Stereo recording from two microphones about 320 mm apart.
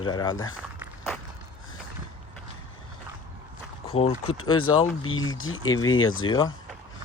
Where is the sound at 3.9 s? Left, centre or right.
Centre.